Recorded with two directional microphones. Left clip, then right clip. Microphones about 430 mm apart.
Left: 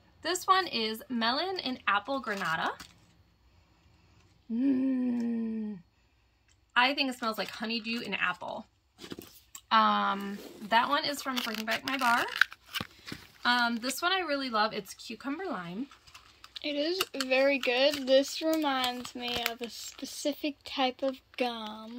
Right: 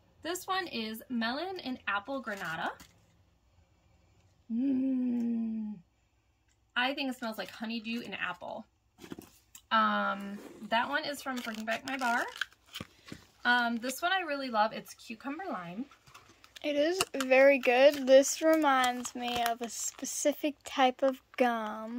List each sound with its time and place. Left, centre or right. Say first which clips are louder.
0.2 s speech: left 8 dB; centre
4.6 s wail: left 2 dB; centre
6.7 s speech: left 5 dB; centre
12.7 s speech: left 8 dB; centre
16.7 s speech: right 2 dB; centre
18.5 s speech: right 4 dB; centre
20.1 s speech: right 3 dB; centre